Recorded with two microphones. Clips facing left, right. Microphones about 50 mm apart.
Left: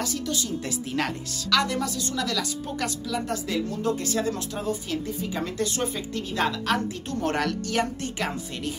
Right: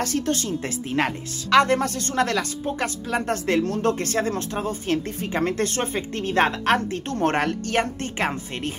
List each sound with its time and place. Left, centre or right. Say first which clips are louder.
0.0 s speech: right 5 dB; right
0.8 s speech: right 6 dB; right
1.6 s speech: right 7 dB; right